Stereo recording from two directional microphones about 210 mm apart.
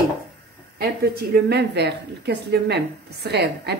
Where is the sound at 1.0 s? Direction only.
50° right (ahead or behind).